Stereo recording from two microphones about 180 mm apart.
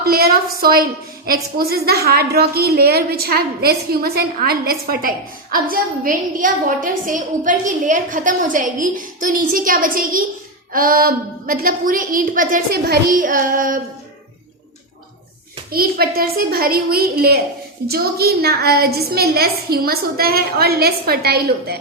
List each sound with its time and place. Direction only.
0.0 s a woman's voice: 55° right (ahead or behind)
15.7 s a woman's voice: 55° right (ahead or behind)